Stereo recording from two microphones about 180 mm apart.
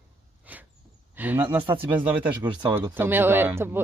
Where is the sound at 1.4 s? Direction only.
25° right (ahead or behind).